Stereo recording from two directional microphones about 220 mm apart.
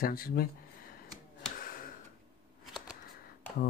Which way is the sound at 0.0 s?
40° left (ahead or behind).